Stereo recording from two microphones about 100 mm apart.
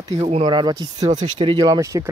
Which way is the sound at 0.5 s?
45° right (ahead or behind).